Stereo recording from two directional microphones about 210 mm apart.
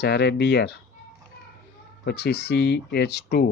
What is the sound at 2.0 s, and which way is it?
Speech, 55° left (ahead or behind).